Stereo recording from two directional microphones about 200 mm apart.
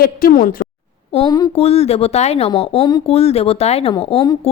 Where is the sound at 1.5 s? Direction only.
30° left (ahead or behind).